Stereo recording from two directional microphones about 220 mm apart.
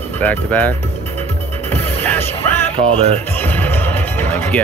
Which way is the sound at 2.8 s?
25° right (ahead or behind).